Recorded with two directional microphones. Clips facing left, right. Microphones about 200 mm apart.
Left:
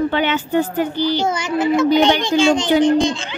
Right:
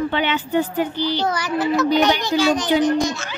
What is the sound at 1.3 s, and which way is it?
A woman's voice, 25° left (ahead or behind).